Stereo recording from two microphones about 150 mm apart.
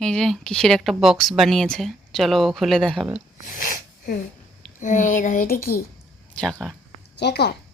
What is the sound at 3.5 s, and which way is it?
Speech, 65° left (ahead or behind).